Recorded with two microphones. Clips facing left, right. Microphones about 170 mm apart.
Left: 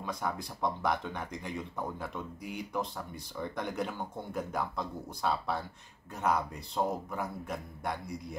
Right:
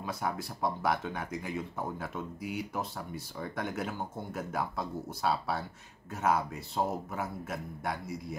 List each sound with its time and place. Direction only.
0.0 s speech: 5° right (ahead or behind)